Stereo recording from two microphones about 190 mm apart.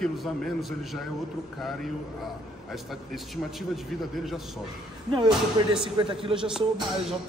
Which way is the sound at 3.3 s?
Centre (ahead or behind).